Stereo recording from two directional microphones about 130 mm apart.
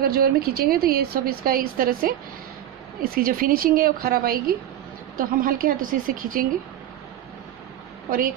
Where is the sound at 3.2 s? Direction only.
90° right.